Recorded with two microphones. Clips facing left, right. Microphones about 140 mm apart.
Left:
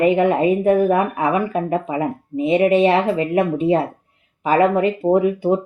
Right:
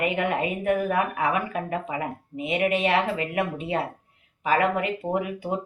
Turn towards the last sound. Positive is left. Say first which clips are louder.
# left 11 dB
turn(degrees=30)  # may be behind; listen again after turning